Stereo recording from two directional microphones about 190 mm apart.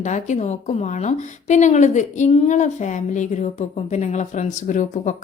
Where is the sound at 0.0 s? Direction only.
40° left (ahead or behind).